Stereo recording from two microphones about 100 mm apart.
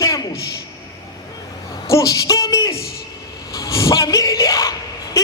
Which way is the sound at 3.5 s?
30° left (ahead or behind).